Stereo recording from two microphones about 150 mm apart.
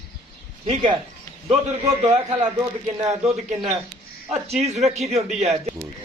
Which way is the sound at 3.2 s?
Centre (ahead or behind).